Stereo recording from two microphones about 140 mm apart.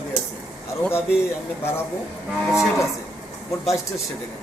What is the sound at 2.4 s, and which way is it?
Speech, 5° right (ahead or behind).